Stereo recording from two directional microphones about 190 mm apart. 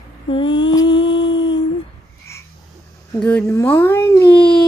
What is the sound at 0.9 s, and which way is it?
Humming, 70° left (ahead or behind).